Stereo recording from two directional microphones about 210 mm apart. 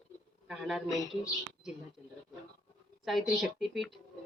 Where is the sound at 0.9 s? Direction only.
15° left (ahead or behind).